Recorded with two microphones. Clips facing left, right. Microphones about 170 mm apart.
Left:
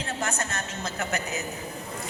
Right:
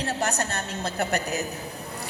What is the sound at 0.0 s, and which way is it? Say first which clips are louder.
A woman's voice: right 4 dB; 35° right (ahead or behind).